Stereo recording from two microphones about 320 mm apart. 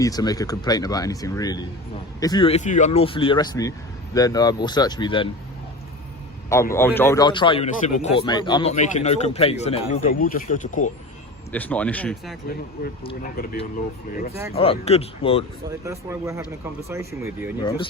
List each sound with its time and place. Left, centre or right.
0.0 s speech: centre
6.5 s speech: centre
11.5 s speech: centre
13.0 s speech: centre
13.3 s speech: left
15.8 s speech: centre